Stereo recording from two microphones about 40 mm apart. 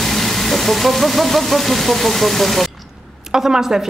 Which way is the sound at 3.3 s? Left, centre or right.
Centre.